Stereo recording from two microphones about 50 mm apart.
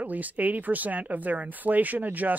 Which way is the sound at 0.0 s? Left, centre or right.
Right.